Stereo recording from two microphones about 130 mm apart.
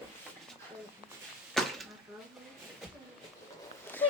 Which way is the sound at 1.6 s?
Centre (ahead or behind).